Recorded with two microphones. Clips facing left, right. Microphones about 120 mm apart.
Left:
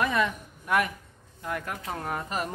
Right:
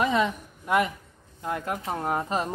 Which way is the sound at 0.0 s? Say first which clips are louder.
Right 2 dB; 20° right (ahead or behind).